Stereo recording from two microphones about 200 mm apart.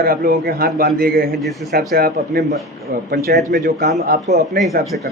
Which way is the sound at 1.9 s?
50° right (ahead or behind).